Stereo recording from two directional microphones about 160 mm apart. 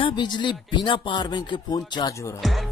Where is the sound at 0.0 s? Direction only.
30° left (ahead or behind).